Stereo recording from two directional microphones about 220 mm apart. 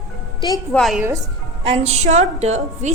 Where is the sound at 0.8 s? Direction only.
Centre (ahead or behind).